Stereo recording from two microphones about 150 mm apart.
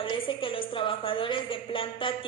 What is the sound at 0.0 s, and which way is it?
A woman's voice, 35° left (ahead or behind).